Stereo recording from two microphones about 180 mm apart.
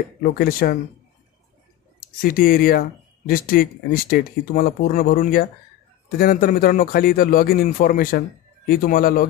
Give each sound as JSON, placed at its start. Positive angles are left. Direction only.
{"t": 0.2, "sound": "a man's voice", "side_deg": 55}
{"t": 2.2, "sound": "a man's voice", "side_deg": 55}